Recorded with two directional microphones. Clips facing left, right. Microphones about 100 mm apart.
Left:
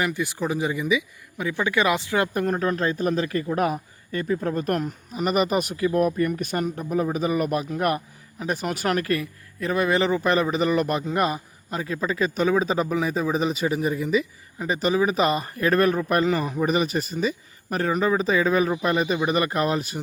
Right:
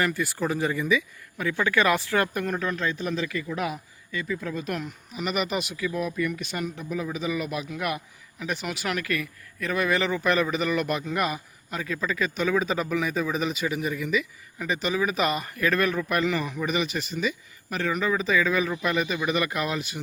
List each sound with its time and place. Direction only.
0.0 s speech: 20° left (ahead or behind)
2.3 s a man's voice: 35° left (ahead or behind)